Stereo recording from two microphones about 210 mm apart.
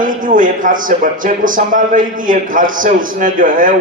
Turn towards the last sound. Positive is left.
turn(degrees=-40)  # may be behind; listen again after turning